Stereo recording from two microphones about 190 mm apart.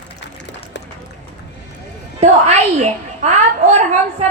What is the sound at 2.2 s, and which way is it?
A woman's voice, 35° right (ahead or behind).